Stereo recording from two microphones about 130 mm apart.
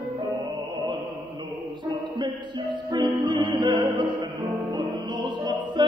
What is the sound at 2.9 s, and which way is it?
Music, 35° right (ahead or behind).